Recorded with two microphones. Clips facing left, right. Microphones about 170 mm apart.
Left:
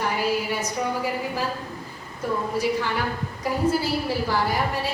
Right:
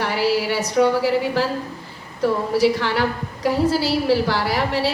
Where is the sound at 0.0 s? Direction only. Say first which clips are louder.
Right 4 dB; 80° right.